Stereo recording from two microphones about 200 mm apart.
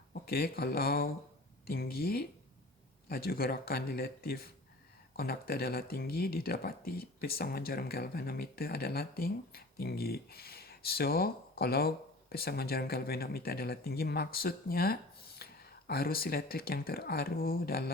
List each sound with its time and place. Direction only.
0.1 s speech: 50° left (ahead or behind)